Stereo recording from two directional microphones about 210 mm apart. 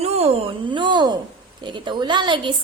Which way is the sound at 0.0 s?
30° right (ahead or behind).